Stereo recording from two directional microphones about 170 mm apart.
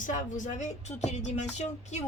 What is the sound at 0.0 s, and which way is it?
Speech, 50° left (ahead or behind).